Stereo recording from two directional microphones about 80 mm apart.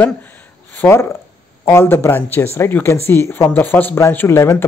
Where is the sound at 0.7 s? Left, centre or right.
Left.